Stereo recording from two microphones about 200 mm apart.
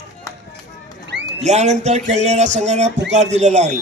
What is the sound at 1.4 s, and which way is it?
A man's voice, 35° right (ahead or behind).